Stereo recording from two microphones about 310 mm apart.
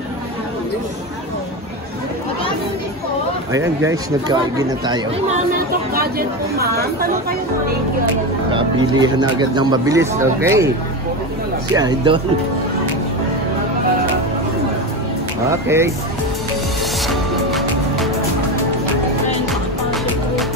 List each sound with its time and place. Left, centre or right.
3.5 s speech: centre
5.9 s speech: right
8.5 s speech: centre
11.7 s speech: centre
15.5 s speech: centre
17.1 s music: centre